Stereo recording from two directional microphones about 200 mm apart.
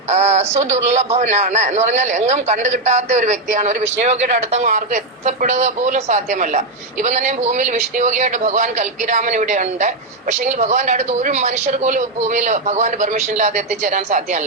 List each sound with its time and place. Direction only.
0.1 s a man's voice: 35° right (ahead or behind)